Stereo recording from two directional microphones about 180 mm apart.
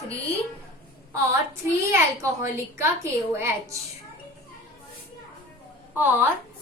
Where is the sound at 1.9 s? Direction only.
15° right (ahead or behind).